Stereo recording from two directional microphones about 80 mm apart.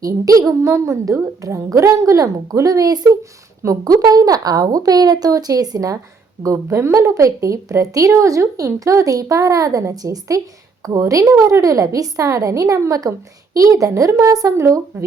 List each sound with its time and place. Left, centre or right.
0.0 s a woman's voice: right